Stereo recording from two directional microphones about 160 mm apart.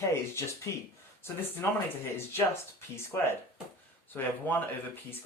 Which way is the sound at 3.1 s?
15° left (ahead or behind).